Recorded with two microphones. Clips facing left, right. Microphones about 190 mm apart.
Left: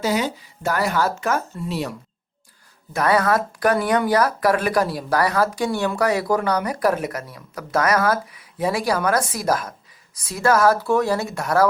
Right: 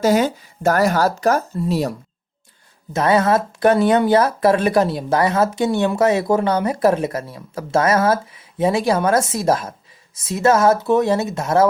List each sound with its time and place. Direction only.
0.0 s speech: 45° right (ahead or behind)
2.9 s speech: 25° right (ahead or behind)